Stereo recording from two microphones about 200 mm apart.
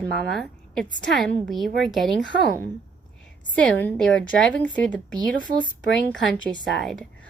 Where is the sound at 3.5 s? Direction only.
5° left (ahead or behind).